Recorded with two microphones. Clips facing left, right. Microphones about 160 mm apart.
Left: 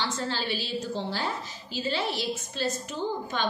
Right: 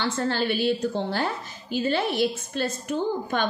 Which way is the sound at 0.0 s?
55° right (ahead or behind).